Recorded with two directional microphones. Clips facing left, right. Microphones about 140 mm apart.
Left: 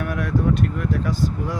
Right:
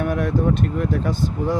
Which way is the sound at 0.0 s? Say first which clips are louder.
Right 3 dB; 25° right (ahead or behind).